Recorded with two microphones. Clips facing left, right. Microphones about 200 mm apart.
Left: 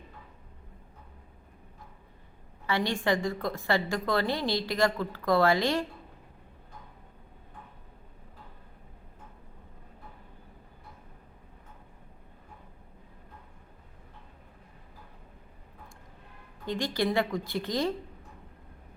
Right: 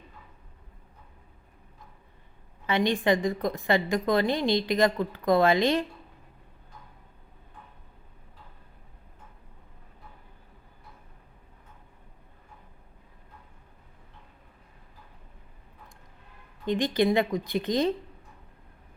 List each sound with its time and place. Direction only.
2.6 s a woman's voice: 20° right (ahead or behind)
16.6 s a woman's voice: 20° right (ahead or behind)